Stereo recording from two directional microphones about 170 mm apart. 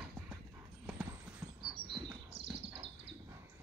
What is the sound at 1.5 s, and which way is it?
Bird, 30° right (ahead or behind).